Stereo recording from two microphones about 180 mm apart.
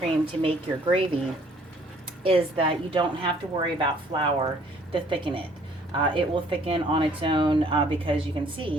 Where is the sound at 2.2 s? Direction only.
30° right (ahead or behind).